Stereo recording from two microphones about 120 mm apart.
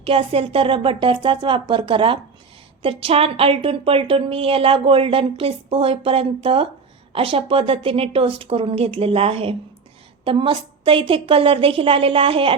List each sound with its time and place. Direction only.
0.0 s a woman's voice: 50° right (ahead or behind)